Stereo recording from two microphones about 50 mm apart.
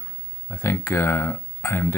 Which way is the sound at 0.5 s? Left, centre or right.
Left.